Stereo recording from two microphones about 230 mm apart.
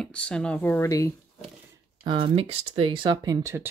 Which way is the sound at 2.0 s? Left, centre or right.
Right.